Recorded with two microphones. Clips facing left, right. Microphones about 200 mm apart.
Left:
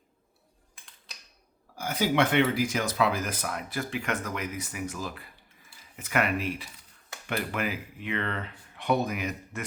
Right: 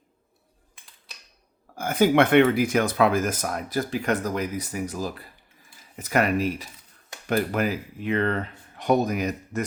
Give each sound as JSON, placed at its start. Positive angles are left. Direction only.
{"t": 1.7, "sound": "speech", "side_deg": -50}